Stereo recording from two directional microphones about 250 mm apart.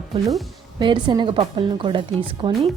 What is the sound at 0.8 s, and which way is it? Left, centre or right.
A woman's voice, centre.